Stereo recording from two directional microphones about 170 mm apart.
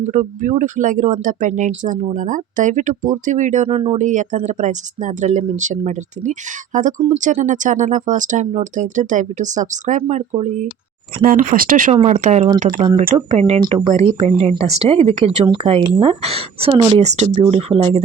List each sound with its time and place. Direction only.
0.0 s speech: 50° right (ahead or behind)
11.2 s speech: 55° right (ahead or behind); by 18.0 s 35° right (ahead or behind)